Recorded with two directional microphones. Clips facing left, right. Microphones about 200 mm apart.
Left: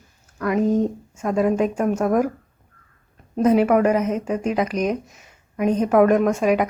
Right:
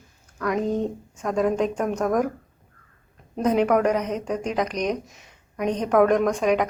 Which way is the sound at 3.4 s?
5° left (ahead or behind).